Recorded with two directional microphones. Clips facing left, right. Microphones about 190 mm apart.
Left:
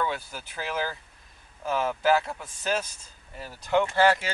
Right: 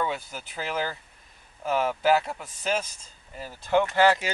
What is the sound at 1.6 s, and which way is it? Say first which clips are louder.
Speech: right 2 dB; 15° right (ahead or behind).